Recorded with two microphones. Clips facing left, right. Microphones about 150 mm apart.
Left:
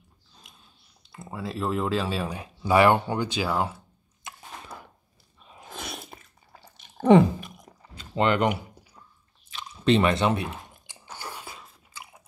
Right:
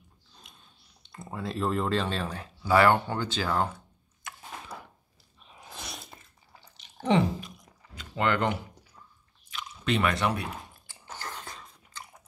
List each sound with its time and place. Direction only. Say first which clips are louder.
0.4 s speech: left 1 dB; centre (ahead or behind)
5.6 s biting: left 5 dB; 55° left (ahead or behind)
7.9 s a sound: left 4 dB; 25° left (ahead or behind)
9.5 s chewing: left 7 dB; 30° left (ahead or behind)
11.1 s chewing: left 1 dB; 10° left (ahead or behind)